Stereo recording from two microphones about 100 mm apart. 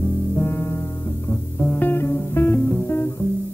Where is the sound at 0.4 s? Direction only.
25° left (ahead or behind).